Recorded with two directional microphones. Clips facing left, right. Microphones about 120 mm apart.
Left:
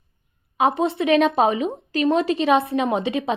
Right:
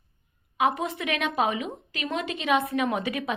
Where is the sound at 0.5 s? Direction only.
30° left (ahead or behind).